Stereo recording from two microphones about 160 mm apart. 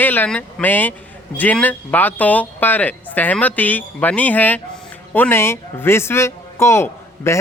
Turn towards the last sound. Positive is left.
turn(degrees=15)  # may be behind; listen again after turning